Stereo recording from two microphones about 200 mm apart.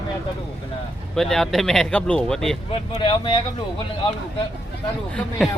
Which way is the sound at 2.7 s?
25° left (ahead or behind).